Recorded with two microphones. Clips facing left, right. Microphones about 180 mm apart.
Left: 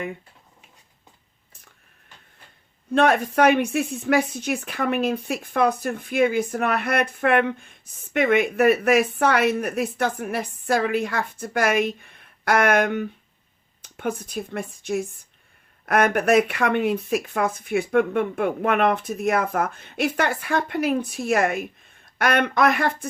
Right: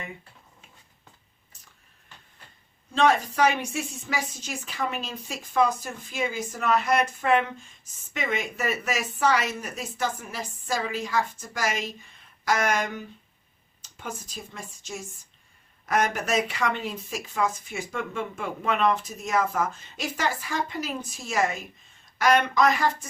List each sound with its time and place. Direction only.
2.9 s a woman's voice: 60° left (ahead or behind)